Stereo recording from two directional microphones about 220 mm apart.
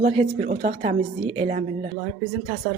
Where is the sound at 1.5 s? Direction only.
35° right (ahead or behind).